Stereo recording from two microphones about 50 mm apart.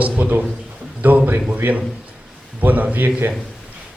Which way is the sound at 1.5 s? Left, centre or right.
Right.